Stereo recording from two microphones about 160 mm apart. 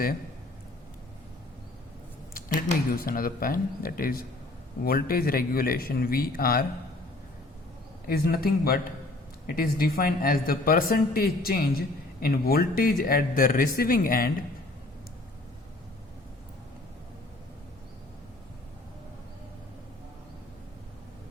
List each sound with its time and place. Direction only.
2.9 s speech: 65° left (ahead or behind)
8.0 s speech: 75° left (ahead or behind)